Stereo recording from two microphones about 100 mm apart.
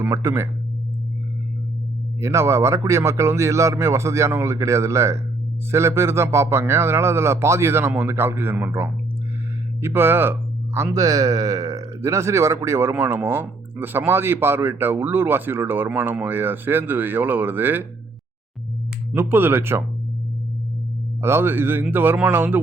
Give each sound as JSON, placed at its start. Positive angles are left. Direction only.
{"t": 0.0, "sound": "speech", "side_deg": -30}
{"t": 2.2, "sound": "a man's voice", "side_deg": -30}
{"t": 10.9, "sound": "a man's voice", "side_deg": -35}
{"t": 19.1, "sound": "a man's voice", "side_deg": -20}
{"t": 21.2, "sound": "a man's voice", "side_deg": -25}